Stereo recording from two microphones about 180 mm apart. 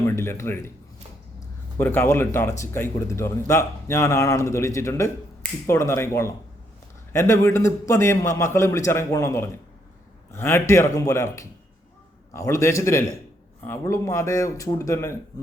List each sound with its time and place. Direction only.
0.0 s a man's voice: 15° left (ahead or behind)
1.8 s a man's voice: 10° left (ahead or behind)